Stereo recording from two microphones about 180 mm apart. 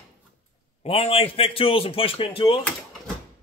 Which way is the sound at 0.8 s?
35° left (ahead or behind).